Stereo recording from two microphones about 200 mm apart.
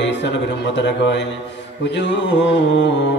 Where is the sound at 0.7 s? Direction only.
60° left (ahead or behind).